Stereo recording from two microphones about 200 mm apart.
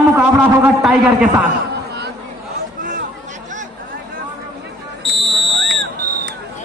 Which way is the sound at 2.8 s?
40° right (ahead or behind).